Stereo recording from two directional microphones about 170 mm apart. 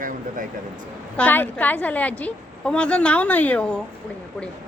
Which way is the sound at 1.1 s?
10° left (ahead or behind).